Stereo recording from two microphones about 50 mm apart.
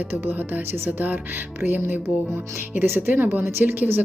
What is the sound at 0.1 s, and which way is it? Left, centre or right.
Speech, right.